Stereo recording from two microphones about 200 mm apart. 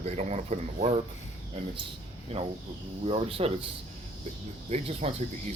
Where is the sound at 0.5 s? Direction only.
30° right (ahead or behind).